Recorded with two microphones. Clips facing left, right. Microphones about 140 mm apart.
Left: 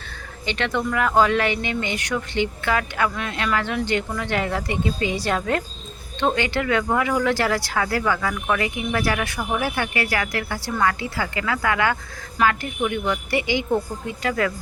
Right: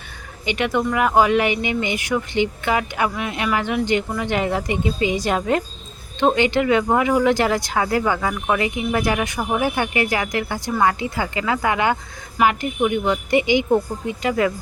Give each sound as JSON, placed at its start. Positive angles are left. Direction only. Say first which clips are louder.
{"t": 0.4, "sound": "speech", "louder": "right 3 dB", "side_deg": -15}